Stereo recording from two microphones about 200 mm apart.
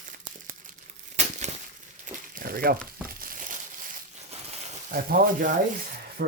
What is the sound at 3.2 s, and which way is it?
Crumpling, 45° right (ahead or behind).